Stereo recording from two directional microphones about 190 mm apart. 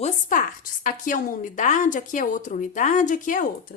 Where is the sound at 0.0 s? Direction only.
45° left (ahead or behind).